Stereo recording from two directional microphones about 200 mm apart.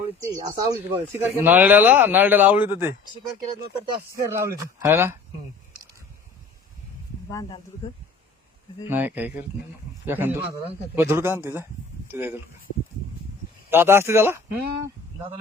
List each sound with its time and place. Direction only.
0.4 s speech: 20° right (ahead or behind)
4.1 s speech: 15° right (ahead or behind)
7.3 s speech: 15° left (ahead or behind)
8.9 s speech: 10° right (ahead or behind)
13.7 s speech: 10° right (ahead or behind)